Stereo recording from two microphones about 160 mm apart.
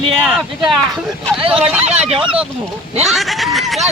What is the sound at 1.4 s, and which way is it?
Speech, 35° right (ahead or behind).